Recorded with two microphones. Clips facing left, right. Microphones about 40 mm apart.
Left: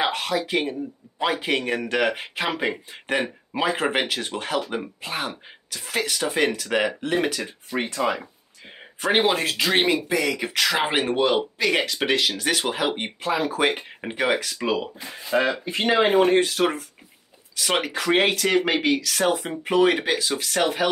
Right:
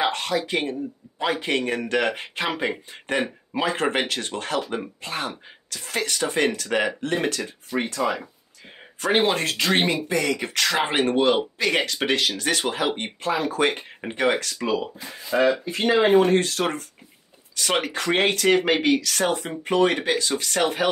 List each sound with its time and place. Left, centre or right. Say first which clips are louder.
0.0 s speech: even; centre
7.4 s speech: right 1 dB; left
9.0 s speech: even; centre
14.5 s speech: even; left
15.5 s speech: right 1 dB; left
15.9 s speech: right 1 dB; centre